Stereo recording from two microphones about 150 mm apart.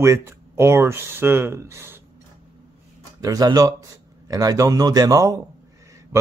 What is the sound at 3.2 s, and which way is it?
A man's voice, 25° right (ahead or behind).